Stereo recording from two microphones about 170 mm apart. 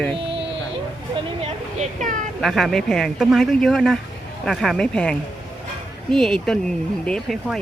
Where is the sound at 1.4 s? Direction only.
40° right (ahead or behind).